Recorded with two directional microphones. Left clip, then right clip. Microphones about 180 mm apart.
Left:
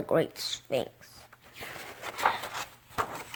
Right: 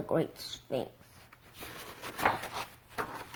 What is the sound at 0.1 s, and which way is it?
Speech, 35° left (ahead or behind).